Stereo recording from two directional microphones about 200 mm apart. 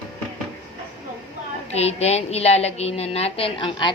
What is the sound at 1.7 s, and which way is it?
A woman's voice, 30° left (ahead or behind).